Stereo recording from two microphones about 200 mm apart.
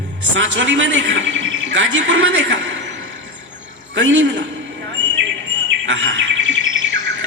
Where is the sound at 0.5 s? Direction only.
65° right (ahead or behind).